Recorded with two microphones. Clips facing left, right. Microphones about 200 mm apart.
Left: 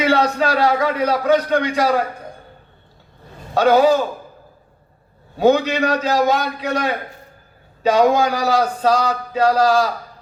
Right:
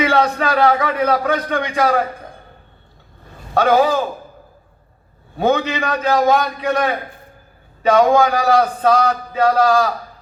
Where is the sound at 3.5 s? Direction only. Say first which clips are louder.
Left 1 dB; 55° right (ahead or behind).